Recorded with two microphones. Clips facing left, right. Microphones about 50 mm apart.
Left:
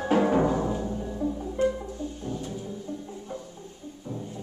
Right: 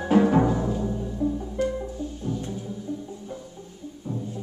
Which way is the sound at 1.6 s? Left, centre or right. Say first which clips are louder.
Left 2 dB; left.